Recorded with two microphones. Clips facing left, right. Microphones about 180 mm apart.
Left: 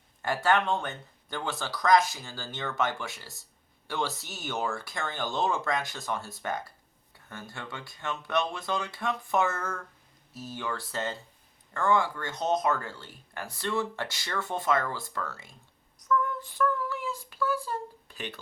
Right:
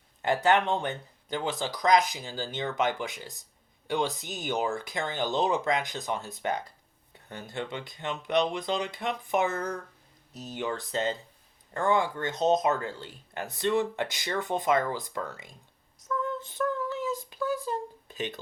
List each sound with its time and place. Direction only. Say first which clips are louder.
0.2 s speech: right 2 dB; 20° right (ahead or behind)
16.0 s child singing: left 3 dB; 25° right (ahead or behind)